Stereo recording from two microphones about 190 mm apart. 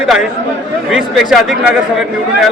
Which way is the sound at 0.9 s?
5° right (ahead or behind).